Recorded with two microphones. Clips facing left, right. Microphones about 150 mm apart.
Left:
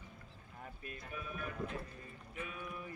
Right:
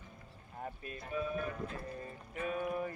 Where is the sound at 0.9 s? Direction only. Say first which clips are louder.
Right 9 dB; 30° right (ahead or behind).